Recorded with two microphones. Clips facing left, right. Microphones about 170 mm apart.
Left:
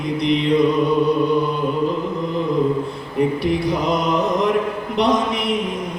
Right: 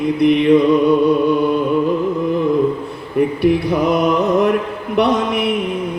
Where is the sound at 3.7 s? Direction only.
60° right (ahead or behind).